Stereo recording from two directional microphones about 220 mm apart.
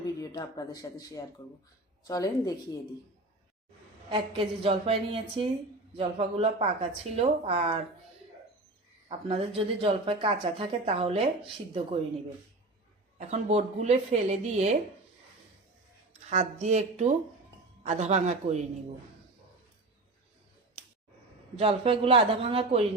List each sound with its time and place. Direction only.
0.0 s speech: 15° left (ahead or behind)
4.1 s speech: 25° right (ahead or behind)
9.0 s speech: 25° right (ahead or behind)
13.1 s a woman's voice: 30° right (ahead or behind)
16.3 s a woman's voice: 30° right (ahead or behind)
21.5 s speech: 25° right (ahead or behind)